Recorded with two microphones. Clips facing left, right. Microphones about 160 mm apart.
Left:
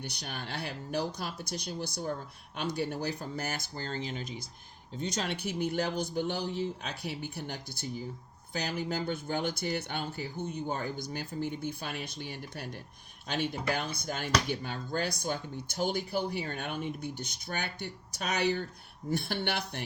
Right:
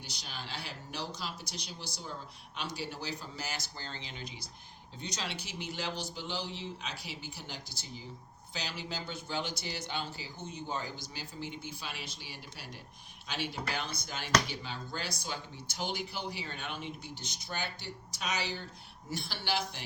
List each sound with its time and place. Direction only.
0.0 s a man's voice: 60° left (ahead or behind)